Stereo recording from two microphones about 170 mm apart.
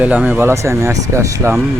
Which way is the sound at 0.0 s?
10° right (ahead or behind).